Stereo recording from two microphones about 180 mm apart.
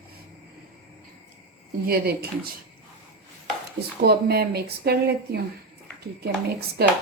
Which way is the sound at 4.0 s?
65° right (ahead or behind).